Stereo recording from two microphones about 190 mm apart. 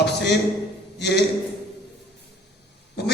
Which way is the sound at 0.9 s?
60° left (ahead or behind).